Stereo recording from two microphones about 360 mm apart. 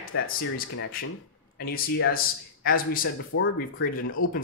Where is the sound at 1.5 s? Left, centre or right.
Left.